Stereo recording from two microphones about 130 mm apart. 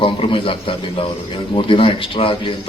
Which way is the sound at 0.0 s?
40° left (ahead or behind).